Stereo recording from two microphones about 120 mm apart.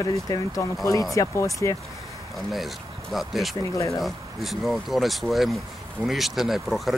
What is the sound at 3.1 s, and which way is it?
Speech, centre (ahead or behind).